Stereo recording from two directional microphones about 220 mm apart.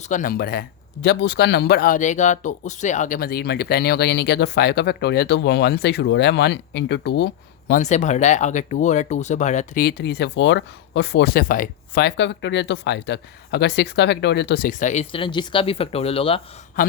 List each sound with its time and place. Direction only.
0.0 s speech: 35° left (ahead or behind)
7.7 s speech: 30° left (ahead or behind)